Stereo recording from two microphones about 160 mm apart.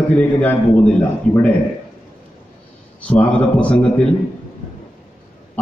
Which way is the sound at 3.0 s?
10° left (ahead or behind).